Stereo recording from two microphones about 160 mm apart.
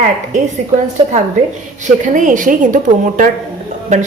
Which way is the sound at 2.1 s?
55° right (ahead or behind).